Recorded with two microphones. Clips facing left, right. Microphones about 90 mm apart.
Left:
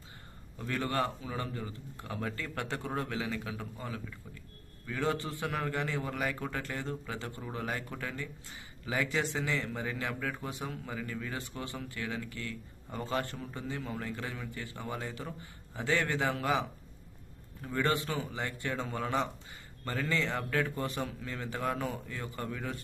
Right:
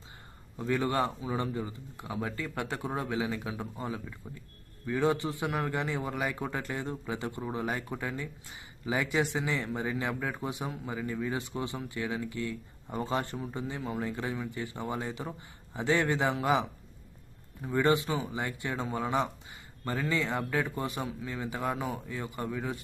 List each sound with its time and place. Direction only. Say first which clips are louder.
0.6 s a man's voice: right 4 dB; 20° right (ahead or behind)